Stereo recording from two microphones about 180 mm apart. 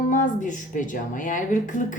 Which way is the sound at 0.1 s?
45° left (ahead or behind).